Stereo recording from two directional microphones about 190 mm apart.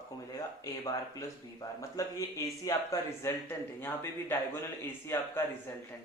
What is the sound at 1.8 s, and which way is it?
Speech, 15° left (ahead or behind).